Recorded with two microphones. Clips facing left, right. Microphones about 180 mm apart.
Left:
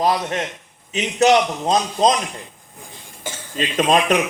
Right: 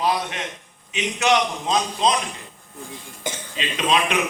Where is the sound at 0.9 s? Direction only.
40° left (ahead or behind).